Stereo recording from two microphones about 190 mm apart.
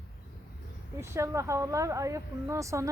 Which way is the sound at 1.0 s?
15° right (ahead or behind).